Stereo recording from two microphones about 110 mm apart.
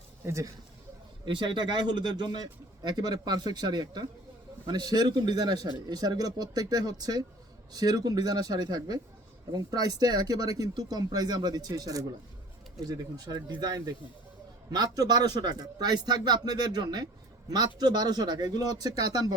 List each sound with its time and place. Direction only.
0.3 s speech: 30° right (ahead or behind)
1.2 s speech: 45° right (ahead or behind)